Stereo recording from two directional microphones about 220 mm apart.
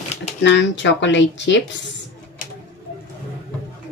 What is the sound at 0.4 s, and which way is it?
Speech, 55° left (ahead or behind).